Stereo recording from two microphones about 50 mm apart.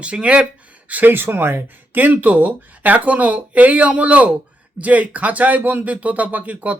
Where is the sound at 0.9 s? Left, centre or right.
Right.